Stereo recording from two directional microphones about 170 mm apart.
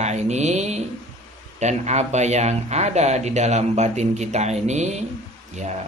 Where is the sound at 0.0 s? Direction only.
40° right (ahead or behind).